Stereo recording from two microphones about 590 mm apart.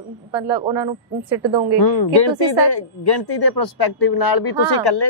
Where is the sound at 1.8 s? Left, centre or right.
Left.